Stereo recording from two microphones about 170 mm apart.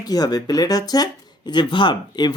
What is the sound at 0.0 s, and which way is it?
Speech, 25° left (ahead or behind).